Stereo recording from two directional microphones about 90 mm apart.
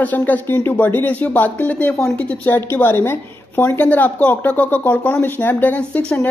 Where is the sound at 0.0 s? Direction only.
20° left (ahead or behind).